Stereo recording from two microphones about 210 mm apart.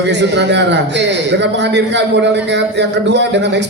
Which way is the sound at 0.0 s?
55° right (ahead or behind).